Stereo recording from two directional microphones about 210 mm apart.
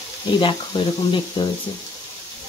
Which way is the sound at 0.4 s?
25° left (ahead or behind).